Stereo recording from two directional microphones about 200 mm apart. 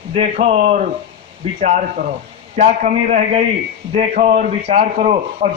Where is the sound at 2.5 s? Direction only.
40° right (ahead or behind).